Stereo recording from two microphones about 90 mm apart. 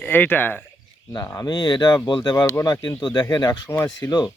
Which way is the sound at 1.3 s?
50° left (ahead or behind).